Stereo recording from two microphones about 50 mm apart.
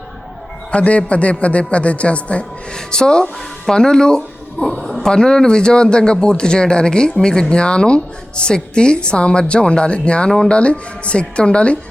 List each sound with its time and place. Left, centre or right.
0.7 s a man's voice: left